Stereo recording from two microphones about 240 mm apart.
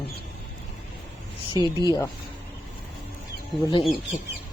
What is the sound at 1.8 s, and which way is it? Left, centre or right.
Speech, centre.